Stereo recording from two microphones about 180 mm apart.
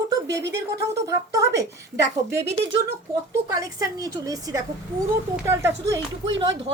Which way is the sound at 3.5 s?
20° right (ahead or behind).